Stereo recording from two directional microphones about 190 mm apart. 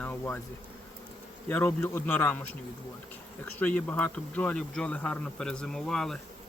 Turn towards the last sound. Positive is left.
turn(degrees=0)  # may be behind; listen again after turning